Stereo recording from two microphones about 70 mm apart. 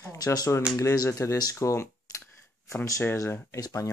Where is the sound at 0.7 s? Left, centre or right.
Left.